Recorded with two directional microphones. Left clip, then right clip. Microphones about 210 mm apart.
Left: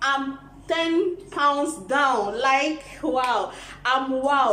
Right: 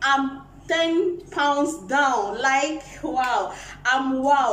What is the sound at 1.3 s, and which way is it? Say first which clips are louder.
A man's voice: left 1 dB; 5° left (ahead or behind).